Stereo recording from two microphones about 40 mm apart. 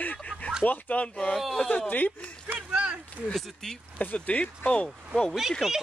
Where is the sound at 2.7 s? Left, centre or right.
Right.